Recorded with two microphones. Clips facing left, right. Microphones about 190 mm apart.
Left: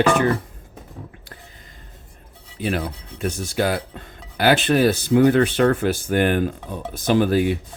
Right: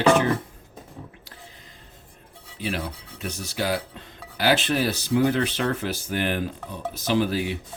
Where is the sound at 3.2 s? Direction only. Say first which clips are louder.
Left 6 dB; 50° left (ahead or behind).